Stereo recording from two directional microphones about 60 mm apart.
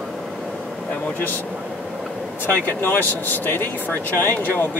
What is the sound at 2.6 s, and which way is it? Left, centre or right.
Speech, left.